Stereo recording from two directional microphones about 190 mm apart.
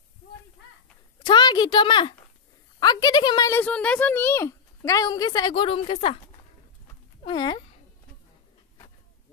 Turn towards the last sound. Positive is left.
turn(degrees=25)  # may be behind; listen again after turning